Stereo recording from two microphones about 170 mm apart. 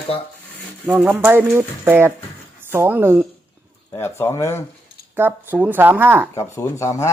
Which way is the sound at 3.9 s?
15° left (ahead or behind).